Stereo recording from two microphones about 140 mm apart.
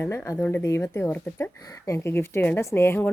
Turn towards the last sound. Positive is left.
turn(degrees=15)  # may be behind; listen again after turning